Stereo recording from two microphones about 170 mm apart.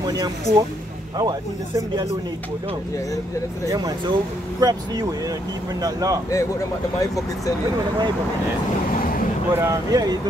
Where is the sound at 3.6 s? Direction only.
20° right (ahead or behind).